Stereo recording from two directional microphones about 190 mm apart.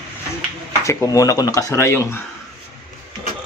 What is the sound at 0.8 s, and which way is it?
Speech, 15° left (ahead or behind).